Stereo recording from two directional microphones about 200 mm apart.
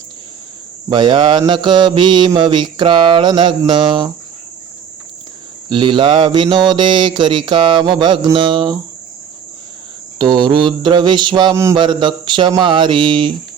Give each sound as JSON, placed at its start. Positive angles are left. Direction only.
{"t": 0.9, "sound": "mantra", "side_deg": -25}
{"t": 5.6, "sound": "mantra", "side_deg": -25}
{"t": 10.2, "sound": "mantra", "side_deg": -25}